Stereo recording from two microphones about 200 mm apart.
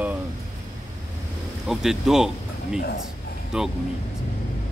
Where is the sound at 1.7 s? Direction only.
Centre (ahead or behind).